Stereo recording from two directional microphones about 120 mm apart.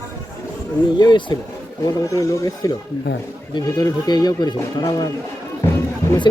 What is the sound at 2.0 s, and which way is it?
Speech, 25° left (ahead or behind).